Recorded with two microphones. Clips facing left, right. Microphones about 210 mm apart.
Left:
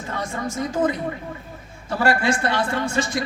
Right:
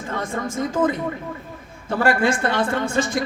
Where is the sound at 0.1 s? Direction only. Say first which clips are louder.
Right 2 dB; 50° right (ahead or behind).